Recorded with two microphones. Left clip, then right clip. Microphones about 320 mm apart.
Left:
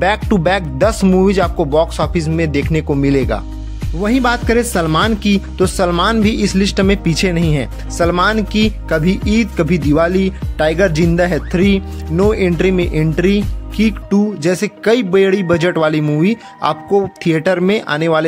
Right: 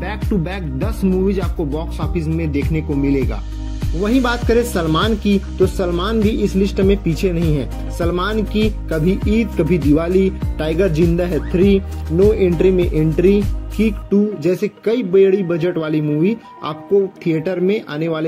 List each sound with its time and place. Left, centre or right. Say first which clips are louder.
0.0 s speech: left 10 dB; left
4.0 s speech: left 3 dB; left